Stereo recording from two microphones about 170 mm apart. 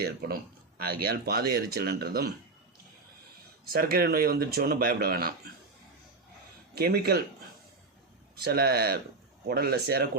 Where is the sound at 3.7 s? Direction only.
60° right (ahead or behind).